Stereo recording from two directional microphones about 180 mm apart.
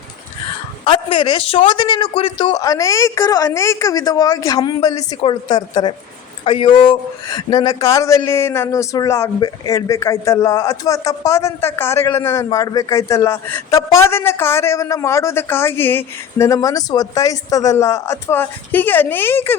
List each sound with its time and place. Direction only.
0.9 s a woman's voice: 30° left (ahead or behind); by 19.5 s 10° left (ahead or behind)